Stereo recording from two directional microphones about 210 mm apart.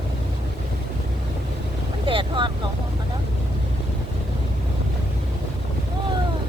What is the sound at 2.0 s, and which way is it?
Speech, 25° right (ahead or behind).